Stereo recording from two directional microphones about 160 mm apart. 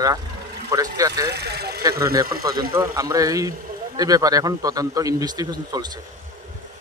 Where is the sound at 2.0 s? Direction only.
20° right (ahead or behind).